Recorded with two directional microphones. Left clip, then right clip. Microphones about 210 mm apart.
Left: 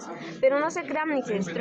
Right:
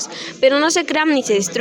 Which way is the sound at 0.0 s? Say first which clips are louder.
Right 8 dB; 40° right (ahead or behind).